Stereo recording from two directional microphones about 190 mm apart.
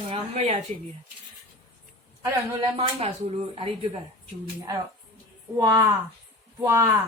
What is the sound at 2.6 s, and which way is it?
A woman's voice, 30° right (ahead or behind).